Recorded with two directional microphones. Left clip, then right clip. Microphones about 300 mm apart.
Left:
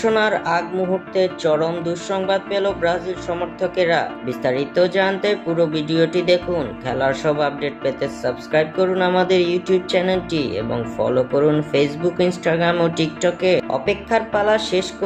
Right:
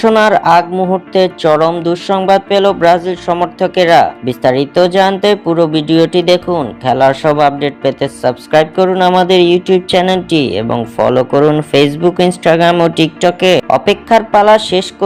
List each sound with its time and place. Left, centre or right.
0.0 s music: right